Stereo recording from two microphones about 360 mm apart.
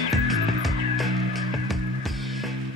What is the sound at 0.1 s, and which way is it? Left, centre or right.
Music, centre.